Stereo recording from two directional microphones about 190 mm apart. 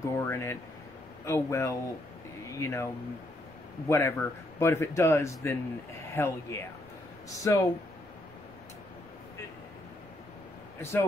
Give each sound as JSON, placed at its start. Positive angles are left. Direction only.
{"t": 0.0, "sound": "speech", "side_deg": 15}
{"t": 10.8, "sound": "speech", "side_deg": 10}